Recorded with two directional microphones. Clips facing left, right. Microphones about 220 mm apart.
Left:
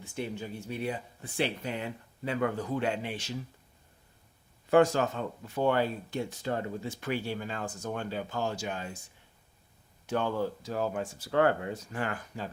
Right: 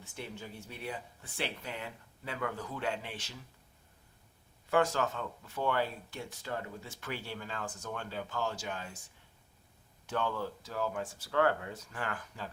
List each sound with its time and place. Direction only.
0.0 s speech: 15° left (ahead or behind)
4.7 s speech: 15° left (ahead or behind)
10.1 s speech: 15° left (ahead or behind)